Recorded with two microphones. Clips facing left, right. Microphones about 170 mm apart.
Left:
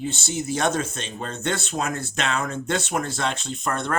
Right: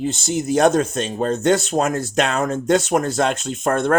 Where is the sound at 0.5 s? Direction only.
40° right (ahead or behind).